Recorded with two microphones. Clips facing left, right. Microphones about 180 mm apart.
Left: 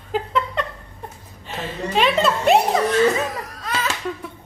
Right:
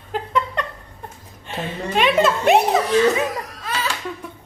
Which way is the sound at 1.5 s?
Centre (ahead or behind).